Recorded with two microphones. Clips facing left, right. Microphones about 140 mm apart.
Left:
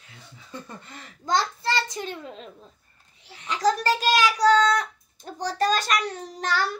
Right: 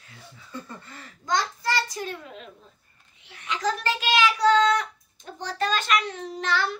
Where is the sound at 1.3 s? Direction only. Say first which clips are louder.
Left 1 dB; 30° left (ahead or behind).